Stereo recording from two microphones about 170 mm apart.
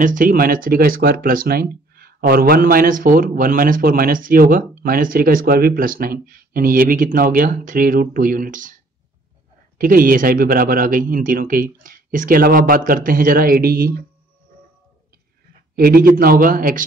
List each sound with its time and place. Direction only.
0.0 s speech: 55° right (ahead or behind)
9.8 s speech: 55° right (ahead or behind)
15.7 s speech: 60° right (ahead or behind)